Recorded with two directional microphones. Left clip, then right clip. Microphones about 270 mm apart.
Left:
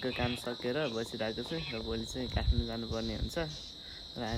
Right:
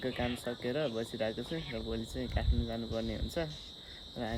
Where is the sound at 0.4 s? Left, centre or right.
Centre.